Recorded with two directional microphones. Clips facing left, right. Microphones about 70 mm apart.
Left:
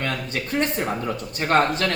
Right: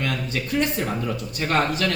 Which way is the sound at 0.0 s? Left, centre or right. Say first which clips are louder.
Even; left.